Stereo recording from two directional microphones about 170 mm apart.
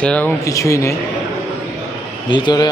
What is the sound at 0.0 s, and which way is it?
Speech, 10° left (ahead or behind).